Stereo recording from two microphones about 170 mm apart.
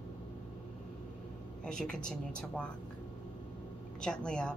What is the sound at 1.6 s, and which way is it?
A woman's voice, 5° left (ahead or behind).